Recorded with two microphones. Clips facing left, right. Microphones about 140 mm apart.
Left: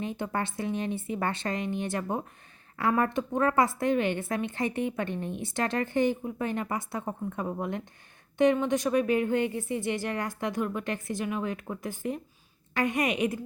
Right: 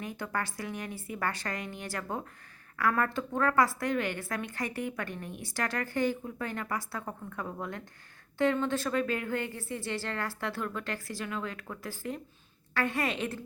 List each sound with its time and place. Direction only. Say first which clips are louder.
0.0 s a woman's voice: left 4 dB; 20° left (ahead or behind)